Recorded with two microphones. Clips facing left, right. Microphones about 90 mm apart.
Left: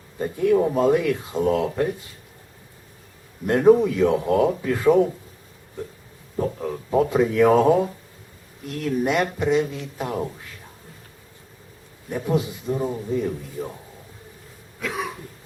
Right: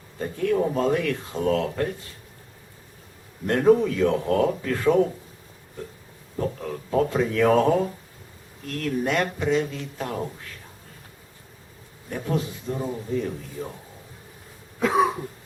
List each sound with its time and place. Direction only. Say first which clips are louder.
0.2 s speech: left 4 dB; 15° left (ahead or behind)
3.4 s speech: left 3 dB; 15° left (ahead or behind)
6.3 s speech: left 3 dB; 15° left (ahead or behind)
12.0 s speech: left 4 dB; 15° left (ahead or behind)
14.8 s cough: right 8 dB; 30° right (ahead or behind)